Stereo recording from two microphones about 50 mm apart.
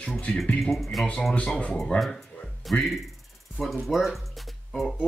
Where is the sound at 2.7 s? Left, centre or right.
Centre.